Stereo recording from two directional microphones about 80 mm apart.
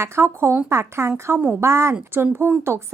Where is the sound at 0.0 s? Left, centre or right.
Right.